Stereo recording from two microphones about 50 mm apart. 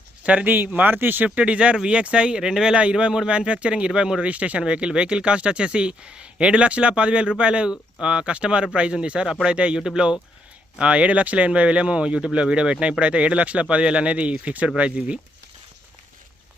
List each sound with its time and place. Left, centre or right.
0.2 s speech: right
0.5 s speech: right
1.4 s speech: right